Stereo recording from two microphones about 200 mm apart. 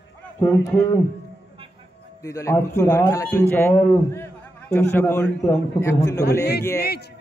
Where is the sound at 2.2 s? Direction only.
15° left (ahead or behind).